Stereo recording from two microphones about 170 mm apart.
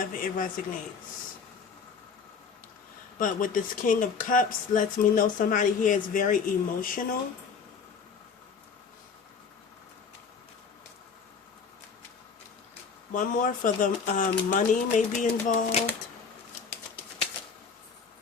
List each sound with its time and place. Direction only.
0.0 s speech: 55° left (ahead or behind)
3.2 s speech: 50° left (ahead or behind)
13.1 s speech: 50° left (ahead or behind)